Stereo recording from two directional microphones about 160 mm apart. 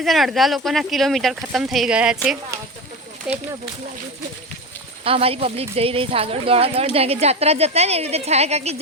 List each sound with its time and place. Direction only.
0.0 s speech: centre (ahead or behind)
5.0 s speech: 35° right (ahead or behind)